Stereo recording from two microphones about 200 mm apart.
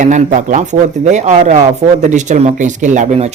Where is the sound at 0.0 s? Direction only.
40° right (ahead or behind).